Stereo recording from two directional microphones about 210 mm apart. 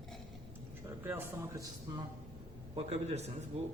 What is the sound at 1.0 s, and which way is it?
Speech, 10° right (ahead or behind).